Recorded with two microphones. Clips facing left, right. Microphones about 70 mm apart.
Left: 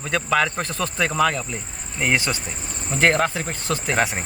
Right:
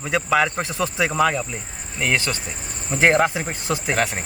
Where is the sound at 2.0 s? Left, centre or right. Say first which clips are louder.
Even; centre.